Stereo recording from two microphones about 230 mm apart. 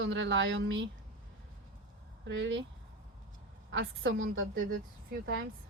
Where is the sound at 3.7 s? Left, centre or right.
Right.